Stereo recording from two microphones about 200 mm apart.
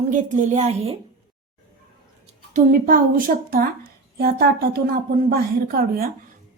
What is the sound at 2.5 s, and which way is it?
A woman's voice, 45° right (ahead or behind).